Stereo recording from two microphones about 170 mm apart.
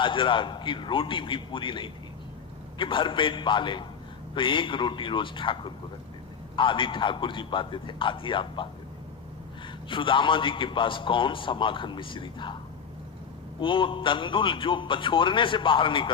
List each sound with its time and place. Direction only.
0.0 s a man's voice: 30° left (ahead or behind)
9.9 s a man's voice: 30° left (ahead or behind)
13.6 s a man's voice: 30° left (ahead or behind)